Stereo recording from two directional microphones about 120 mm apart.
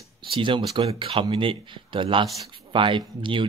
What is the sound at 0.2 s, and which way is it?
Speech, 45° right (ahead or behind).